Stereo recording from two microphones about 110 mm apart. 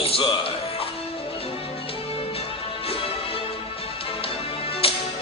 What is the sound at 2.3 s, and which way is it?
Music, 60° left (ahead or behind).